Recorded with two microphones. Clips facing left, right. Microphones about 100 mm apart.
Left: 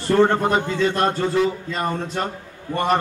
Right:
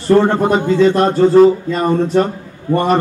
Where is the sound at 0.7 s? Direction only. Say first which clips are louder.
Right 8 dB; 20° right (ahead or behind).